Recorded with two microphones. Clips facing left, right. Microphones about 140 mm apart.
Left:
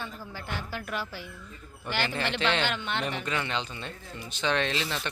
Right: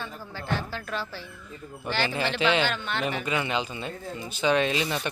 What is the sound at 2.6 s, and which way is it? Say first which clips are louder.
Speech: right 1 dB; 20° left (ahead or behind).